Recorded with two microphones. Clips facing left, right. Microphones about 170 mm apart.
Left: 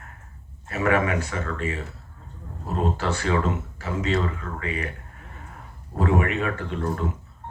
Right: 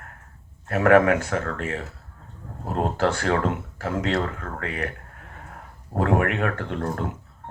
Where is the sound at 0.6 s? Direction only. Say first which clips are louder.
Right 6 dB; 60° right (ahead or behind).